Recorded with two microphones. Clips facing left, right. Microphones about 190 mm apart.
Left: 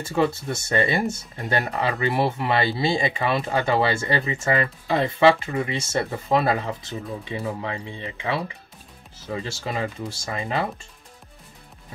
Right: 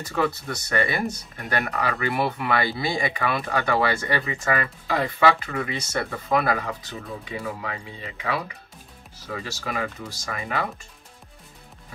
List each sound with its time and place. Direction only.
0.0 s speech: 25° left (ahead or behind)